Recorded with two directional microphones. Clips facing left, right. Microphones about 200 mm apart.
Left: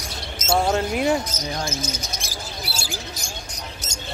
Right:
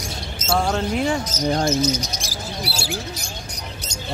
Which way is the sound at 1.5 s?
55° right (ahead or behind).